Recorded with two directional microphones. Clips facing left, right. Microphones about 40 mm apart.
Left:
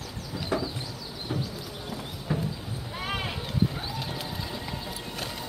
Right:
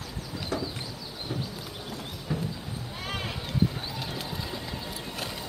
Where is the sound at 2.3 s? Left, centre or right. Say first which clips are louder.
Left 2 dB; centre.